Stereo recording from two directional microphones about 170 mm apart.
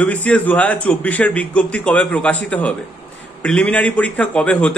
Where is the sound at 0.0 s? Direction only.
10° left (ahead or behind).